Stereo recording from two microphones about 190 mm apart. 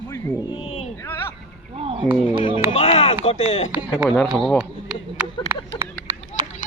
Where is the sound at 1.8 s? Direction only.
30° right (ahead or behind).